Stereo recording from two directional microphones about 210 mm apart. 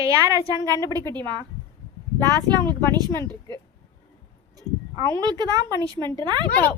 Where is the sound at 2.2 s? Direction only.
20° right (ahead or behind).